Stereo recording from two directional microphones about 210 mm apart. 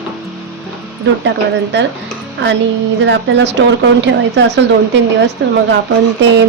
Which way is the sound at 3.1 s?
55° right (ahead or behind).